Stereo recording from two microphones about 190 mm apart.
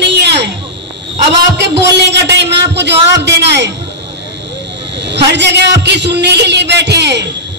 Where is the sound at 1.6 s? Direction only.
65° right (ahead or behind).